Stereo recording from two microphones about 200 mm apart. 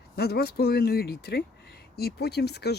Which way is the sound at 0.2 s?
50° left (ahead or behind).